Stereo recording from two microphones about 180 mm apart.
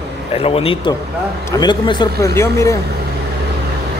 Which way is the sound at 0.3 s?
35° left (ahead or behind).